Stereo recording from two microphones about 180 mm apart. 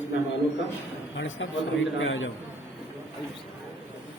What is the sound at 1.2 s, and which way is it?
A man's voice, 90° left.